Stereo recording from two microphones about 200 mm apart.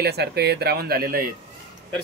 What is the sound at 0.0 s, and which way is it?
Speech, 55° right (ahead or behind).